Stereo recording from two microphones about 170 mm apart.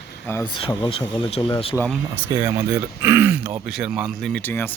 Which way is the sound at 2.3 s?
20° right (ahead or behind).